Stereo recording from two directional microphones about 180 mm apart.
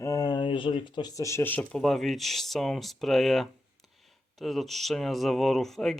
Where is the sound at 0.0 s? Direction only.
20° left (ahead or behind).